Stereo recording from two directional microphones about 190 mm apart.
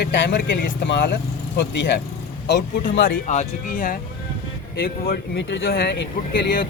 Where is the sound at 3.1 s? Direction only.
40° left (ahead or behind); by 6.6 s 70° left (ahead or behind).